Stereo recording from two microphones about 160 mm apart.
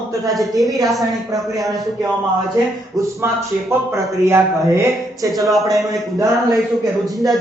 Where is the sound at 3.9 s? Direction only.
15° right (ahead or behind).